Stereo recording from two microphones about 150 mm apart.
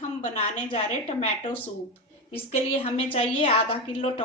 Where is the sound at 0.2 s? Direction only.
50° left (ahead or behind).